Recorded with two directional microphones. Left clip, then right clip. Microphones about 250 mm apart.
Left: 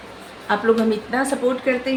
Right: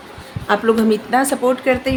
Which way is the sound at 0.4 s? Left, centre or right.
Right.